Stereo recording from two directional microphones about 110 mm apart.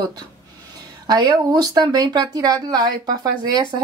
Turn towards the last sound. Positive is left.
turn(degrees=-40)  # may be behind; listen again after turning